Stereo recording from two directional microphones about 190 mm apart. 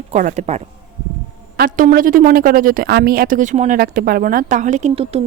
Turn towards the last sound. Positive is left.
turn(degrees=-30)  # may be behind; listen again after turning